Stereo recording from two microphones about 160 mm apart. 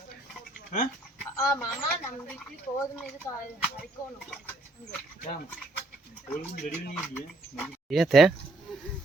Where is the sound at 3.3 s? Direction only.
20° left (ahead or behind).